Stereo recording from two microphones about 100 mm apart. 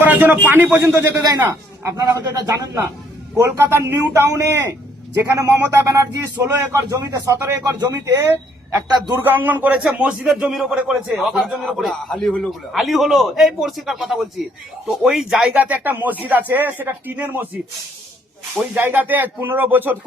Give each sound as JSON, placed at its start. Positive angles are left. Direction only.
{"t": 0.0, "sound": "a sound", "side_deg": -20}
{"t": 0.5, "sound": "a man's voice", "side_deg": -20}
{"t": 3.3, "sound": "a man's voice", "side_deg": -25}
{"t": 7.6, "sound": "a man's voice", "side_deg": -40}
{"t": 9.1, "sound": "a man's voice", "side_deg": -20}
{"t": 15.5, "sound": "speech", "side_deg": -15}
{"t": 18.7, "sound": "speech", "side_deg": -20}